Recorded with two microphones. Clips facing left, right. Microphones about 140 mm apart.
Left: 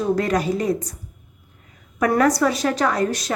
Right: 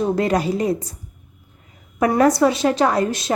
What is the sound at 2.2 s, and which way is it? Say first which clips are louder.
A woman's voice: right 5 dB; 25° right (ahead or behind).